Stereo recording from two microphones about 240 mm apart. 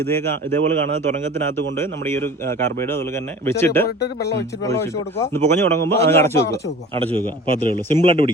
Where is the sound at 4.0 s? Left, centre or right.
Left.